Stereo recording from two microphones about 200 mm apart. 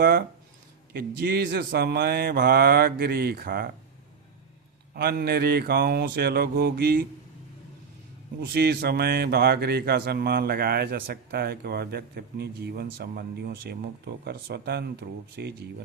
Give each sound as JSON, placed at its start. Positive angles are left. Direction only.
{"t": 0.0, "sound": "speech", "side_deg": -50}
{"t": 4.9, "sound": "speech", "side_deg": -50}
{"t": 8.4, "sound": "speech", "side_deg": -55}